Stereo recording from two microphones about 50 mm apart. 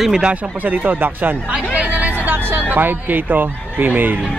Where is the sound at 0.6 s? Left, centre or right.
Right.